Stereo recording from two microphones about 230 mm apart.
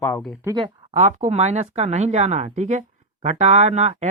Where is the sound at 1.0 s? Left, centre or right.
Right.